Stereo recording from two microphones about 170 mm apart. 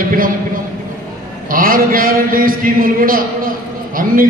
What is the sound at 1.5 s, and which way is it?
A man's voice, 55° right (ahead or behind).